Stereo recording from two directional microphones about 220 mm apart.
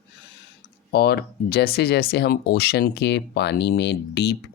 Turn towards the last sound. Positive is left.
turn(degrees=50)  # may be behind; listen again after turning